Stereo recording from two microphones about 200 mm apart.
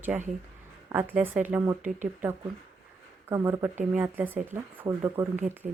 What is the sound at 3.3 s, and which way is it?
Speech, 10° right (ahead or behind).